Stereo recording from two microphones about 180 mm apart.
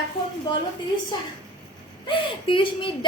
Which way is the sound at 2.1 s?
30° left (ahead or behind).